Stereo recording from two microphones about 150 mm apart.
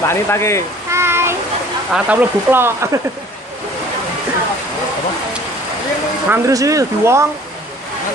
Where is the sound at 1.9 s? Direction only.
10° right (ahead or behind).